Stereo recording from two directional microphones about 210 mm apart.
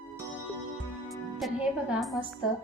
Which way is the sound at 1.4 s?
Centre (ahead or behind).